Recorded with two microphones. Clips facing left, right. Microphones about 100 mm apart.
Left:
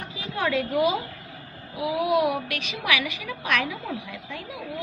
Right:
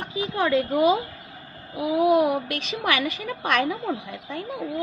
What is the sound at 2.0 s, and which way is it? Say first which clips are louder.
A woman's voice: right 4 dB; 35° right (ahead or behind).